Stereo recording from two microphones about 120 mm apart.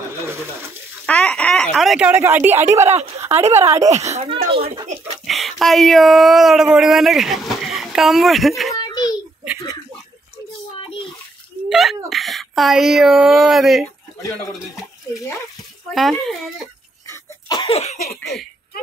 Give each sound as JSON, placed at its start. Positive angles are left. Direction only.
{"t": 0.2, "sound": "a sound", "side_deg": -20}
{"t": 1.0, "sound": "chicken", "side_deg": 10}
{"t": 2.0, "sound": "a woman's voice", "side_deg": -15}
{"t": 4.0, "sound": "speech", "side_deg": -60}
{"t": 5.2, "sound": "speech", "side_deg": 0}
{"t": 8.7, "sound": "a sound", "side_deg": 35}
{"t": 11.7, "sound": "speech", "side_deg": 0}
{"t": 15.9, "sound": "a child's voice", "side_deg": 0}
{"t": 17.1, "sound": "cough", "side_deg": 30}
{"t": 17.6, "sound": "cough", "side_deg": 60}
{"t": 18.0, "sound": "a child's voice", "side_deg": 0}